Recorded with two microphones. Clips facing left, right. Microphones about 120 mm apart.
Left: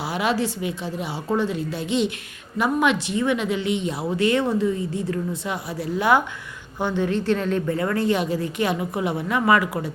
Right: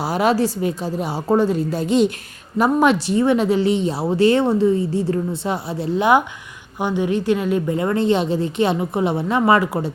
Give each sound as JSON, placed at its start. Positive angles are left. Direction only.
{"t": 0.0, "sound": "a woman's voice", "side_deg": -40}
{"t": 7.8, "sound": "speech", "side_deg": -25}